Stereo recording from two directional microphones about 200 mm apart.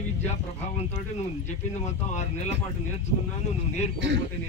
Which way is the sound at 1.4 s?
35° left (ahead or behind).